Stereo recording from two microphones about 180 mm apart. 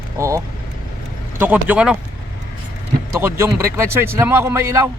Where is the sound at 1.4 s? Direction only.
10° right (ahead or behind).